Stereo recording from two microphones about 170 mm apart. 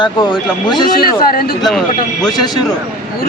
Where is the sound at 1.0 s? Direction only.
60° left (ahead or behind).